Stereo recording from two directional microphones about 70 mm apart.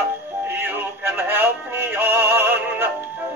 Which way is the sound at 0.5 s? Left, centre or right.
Right.